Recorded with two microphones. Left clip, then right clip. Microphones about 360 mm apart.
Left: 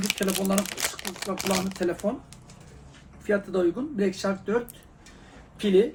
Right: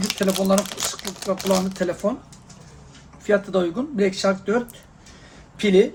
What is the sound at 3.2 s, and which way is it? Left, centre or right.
Speech, right.